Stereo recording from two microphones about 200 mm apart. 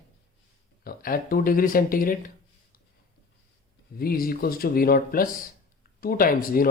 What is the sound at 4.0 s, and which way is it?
Speech, 50° left (ahead or behind).